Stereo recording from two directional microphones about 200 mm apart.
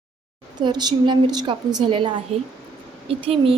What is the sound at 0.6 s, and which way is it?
A woman's voice, 20° right (ahead or behind).